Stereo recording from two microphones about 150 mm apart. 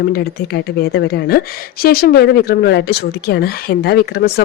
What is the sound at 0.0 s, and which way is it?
Speech, 90° left.